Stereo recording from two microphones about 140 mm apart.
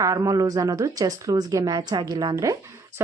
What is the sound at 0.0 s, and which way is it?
Speech, 20° right (ahead or behind).